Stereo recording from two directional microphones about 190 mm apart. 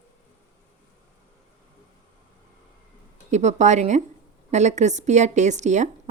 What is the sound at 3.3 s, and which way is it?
A woman's voice, 40° right (ahead or behind).